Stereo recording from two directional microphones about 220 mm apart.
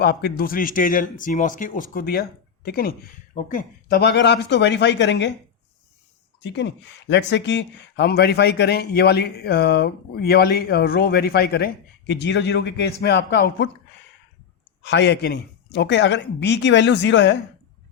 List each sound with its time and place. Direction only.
0.0 s speech: 45° left (ahead or behind)
6.4 s speech: 55° left (ahead or behind)
14.8 s speech: 50° left (ahead or behind)